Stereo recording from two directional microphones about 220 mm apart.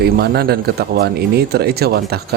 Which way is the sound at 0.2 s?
45° right (ahead or behind).